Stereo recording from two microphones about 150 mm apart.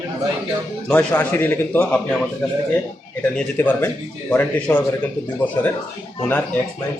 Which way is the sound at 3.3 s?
10° left (ahead or behind).